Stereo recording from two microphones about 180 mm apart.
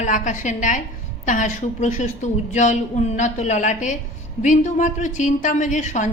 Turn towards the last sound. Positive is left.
turn(degrees=40)  # may be behind; listen again after turning